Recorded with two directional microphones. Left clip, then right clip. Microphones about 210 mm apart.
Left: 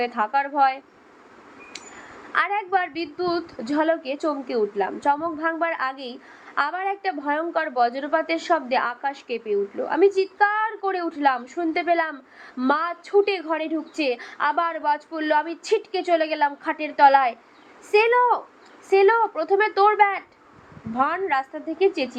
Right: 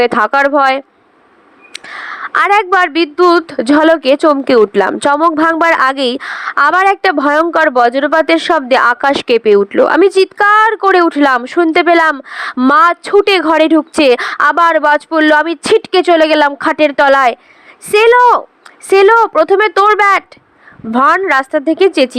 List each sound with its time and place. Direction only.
0.0 s a woman's voice: 55° right (ahead or behind)
2.3 s a woman's voice: 55° right (ahead or behind)